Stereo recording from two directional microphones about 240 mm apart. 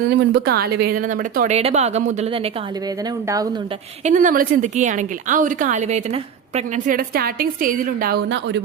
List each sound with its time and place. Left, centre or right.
0.2 s speech: right
4.0 s speech: right